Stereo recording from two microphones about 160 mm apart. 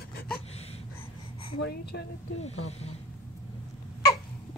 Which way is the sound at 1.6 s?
90° left.